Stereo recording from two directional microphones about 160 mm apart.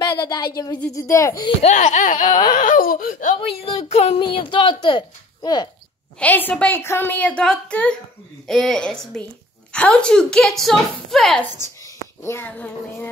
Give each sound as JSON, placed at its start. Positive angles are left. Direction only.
{"t": 0.0, "sound": "a sound", "side_deg": 25}
{"t": 0.9, "sound": "speech", "side_deg": 20}
{"t": 1.6, "sound": "laughter", "side_deg": 50}
{"t": 2.2, "sound": "speech", "side_deg": 25}
{"t": 2.5, "sound": "a sound", "side_deg": 55}
{"t": 3.3, "sound": "a woman's voice", "side_deg": 40}
{"t": 6.1, "sound": "a woman's voice", "side_deg": 10}
{"t": 12.2, "sound": "a woman's voice", "side_deg": 15}